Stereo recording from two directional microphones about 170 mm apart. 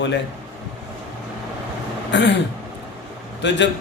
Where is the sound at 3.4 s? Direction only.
90° left.